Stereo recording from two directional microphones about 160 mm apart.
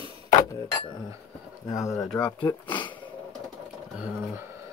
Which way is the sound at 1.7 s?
20° left (ahead or behind).